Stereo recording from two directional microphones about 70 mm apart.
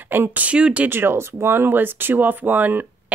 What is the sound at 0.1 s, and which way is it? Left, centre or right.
Speech, right.